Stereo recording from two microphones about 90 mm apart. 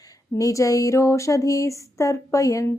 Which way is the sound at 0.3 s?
40° left (ahead or behind).